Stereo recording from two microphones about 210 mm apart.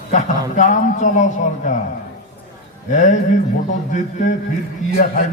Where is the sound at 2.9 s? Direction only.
35° left (ahead or behind).